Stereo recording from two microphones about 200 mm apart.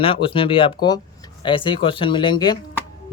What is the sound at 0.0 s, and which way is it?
Speech, 25° left (ahead or behind).